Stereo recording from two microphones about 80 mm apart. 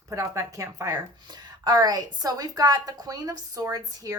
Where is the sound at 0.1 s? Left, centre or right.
Right.